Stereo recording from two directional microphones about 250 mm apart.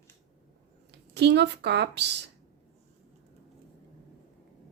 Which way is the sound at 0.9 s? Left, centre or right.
Right.